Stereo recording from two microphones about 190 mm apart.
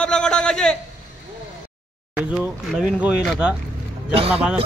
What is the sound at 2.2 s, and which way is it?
A man's voice, 5° right (ahead or behind).